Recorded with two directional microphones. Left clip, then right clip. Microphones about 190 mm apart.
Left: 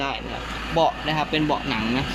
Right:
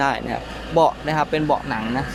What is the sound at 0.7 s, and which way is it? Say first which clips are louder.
Speech: right 4 dB; 25° right (ahead or behind).